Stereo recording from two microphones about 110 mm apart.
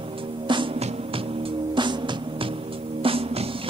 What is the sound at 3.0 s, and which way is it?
Music, 55° right (ahead or behind).